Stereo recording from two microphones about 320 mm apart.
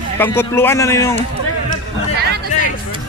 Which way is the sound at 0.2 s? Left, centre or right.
Centre.